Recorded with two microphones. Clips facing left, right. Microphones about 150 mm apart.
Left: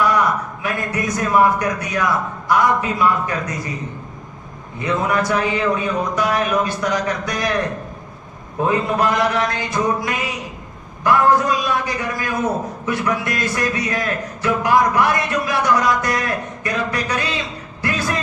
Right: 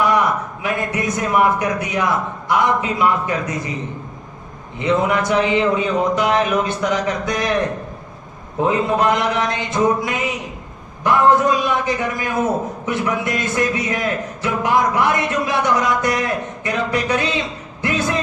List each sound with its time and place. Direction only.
0.6 s a man's voice: 20° right (ahead or behind)
4.8 s a man's voice: 20° right (ahead or behind)
8.6 s a man's voice: 20° right (ahead or behind)
17.8 s a sound: 20° right (ahead or behind)